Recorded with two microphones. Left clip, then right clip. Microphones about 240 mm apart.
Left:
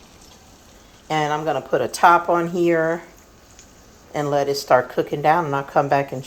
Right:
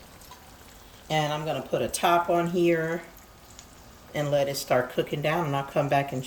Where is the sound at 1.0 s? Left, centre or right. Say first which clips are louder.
Left 5 dB; left.